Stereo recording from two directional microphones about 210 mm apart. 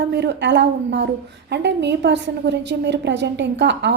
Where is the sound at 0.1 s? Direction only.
55° right (ahead or behind).